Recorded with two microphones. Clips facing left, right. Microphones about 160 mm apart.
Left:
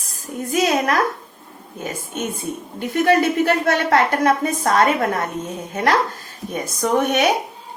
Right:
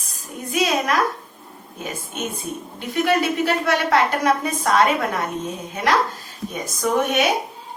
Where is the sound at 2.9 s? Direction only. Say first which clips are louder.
Left 3 dB; 50° left (ahead or behind).